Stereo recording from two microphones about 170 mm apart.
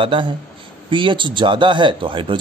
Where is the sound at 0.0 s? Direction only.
30° right (ahead or behind).